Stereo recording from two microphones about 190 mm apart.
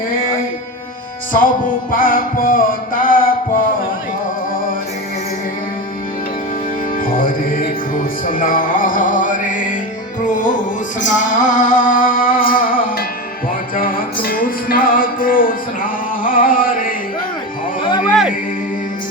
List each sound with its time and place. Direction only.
1.3 s music: 45° left (ahead or behind)
7.0 s music: 45° left (ahead or behind)
18.1 s music: centre (ahead or behind)